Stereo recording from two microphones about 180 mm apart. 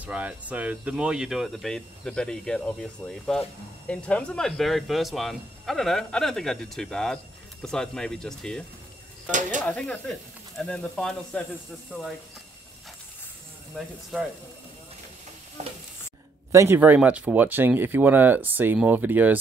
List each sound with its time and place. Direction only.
0.0 s speech: 5° right (ahead or behind)
9.7 s speech: 5° left (ahead or behind)
13.7 s speech: centre (ahead or behind)
15.6 s stir: 40° right (ahead or behind)
16.5 s speech: 15° right (ahead or behind)